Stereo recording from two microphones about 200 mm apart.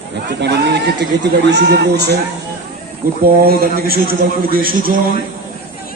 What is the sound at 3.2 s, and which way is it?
A man's voice, 50° right (ahead or behind).